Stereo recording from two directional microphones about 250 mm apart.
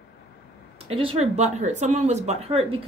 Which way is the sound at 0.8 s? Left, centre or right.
Right.